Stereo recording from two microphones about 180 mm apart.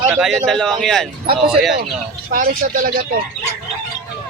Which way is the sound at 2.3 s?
55° right (ahead or behind).